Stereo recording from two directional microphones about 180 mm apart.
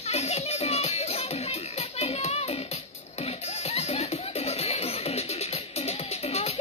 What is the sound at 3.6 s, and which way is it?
Music, 35° left (ahead or behind).